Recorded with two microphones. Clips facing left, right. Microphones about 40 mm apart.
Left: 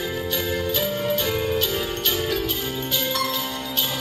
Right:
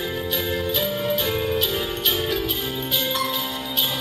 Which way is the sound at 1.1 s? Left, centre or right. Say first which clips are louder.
Even; centre.